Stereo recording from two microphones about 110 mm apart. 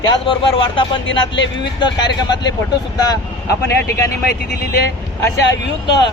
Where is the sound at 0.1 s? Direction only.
50° left (ahead or behind).